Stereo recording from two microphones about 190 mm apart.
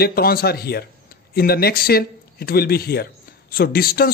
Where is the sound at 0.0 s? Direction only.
55° left (ahead or behind).